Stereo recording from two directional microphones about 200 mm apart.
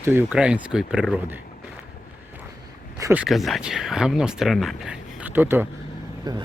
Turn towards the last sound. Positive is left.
turn(degrees=-20)  # may be behind; listen again after turning